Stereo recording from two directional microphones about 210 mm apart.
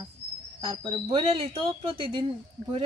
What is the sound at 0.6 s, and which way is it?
Speech, 25° right (ahead or behind).